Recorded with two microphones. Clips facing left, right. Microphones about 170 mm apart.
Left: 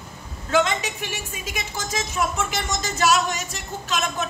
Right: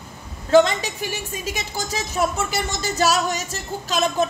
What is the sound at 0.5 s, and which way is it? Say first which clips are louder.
Speech: right 6 dB; 35° right (ahead or behind).